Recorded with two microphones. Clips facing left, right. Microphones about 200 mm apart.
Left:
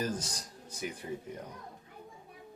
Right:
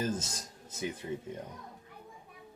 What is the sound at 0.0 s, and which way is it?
Speech, 25° right (ahead or behind).